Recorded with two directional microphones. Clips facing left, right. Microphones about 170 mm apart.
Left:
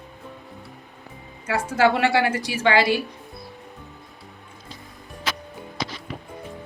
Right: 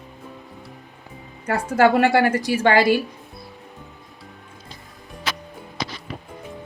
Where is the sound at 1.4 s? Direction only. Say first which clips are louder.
Right 3 dB; 55° right (ahead or behind).